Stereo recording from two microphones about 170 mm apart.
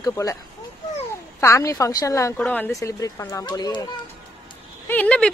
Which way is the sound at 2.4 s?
10° left (ahead or behind).